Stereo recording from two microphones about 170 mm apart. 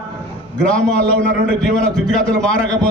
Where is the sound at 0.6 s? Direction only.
5° left (ahead or behind).